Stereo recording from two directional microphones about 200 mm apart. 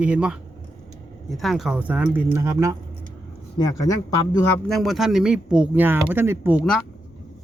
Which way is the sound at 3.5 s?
20° left (ahead or behind).